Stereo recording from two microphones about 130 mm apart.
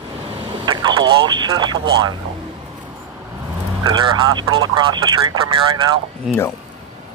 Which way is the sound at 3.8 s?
40° right (ahead or behind).